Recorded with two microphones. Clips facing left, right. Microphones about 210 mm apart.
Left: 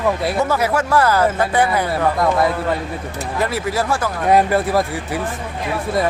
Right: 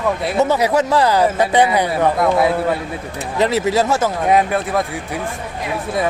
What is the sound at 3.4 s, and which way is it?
Speech, 20° right (ahead or behind).